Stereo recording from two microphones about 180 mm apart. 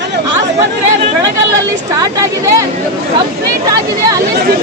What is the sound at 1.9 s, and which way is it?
Speech, 20° right (ahead or behind).